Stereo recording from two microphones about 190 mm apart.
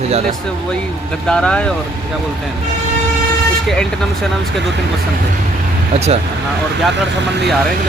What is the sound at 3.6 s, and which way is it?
Speech, centre (ahead or behind).